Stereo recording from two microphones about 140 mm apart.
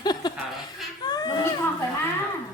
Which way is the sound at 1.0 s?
30° left (ahead or behind).